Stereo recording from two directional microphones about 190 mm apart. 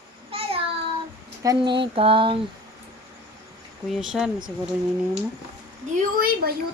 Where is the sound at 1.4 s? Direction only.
20° right (ahead or behind).